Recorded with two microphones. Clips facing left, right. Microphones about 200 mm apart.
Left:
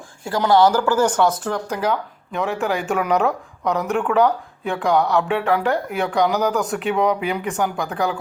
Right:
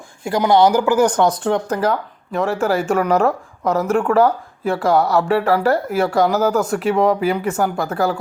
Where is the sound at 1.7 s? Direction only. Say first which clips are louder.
Right 3 dB; 5° right (ahead or behind).